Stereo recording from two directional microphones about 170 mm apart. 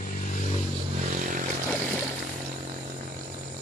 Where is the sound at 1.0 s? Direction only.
45° right (ahead or behind).